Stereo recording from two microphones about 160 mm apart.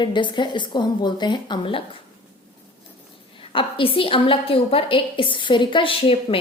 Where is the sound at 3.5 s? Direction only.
35° left (ahead or behind).